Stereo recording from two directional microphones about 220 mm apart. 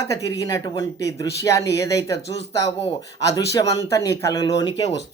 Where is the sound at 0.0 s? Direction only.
15° left (ahead or behind).